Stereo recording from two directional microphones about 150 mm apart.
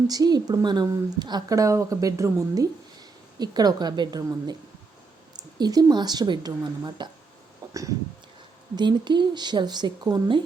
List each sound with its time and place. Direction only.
0.1 s a woman's voice: 25° right (ahead or behind)
7.7 s a sound: 20° right (ahead or behind)
8.7 s a woman's voice: 30° right (ahead or behind)